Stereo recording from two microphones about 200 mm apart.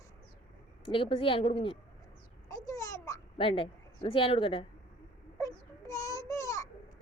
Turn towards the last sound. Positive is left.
turn(degrees=15)  # may be behind; listen again after turning